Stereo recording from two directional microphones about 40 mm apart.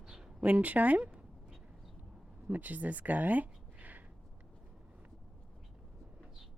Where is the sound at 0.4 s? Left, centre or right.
Right.